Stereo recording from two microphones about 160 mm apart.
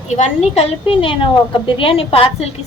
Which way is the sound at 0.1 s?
45° left (ahead or behind).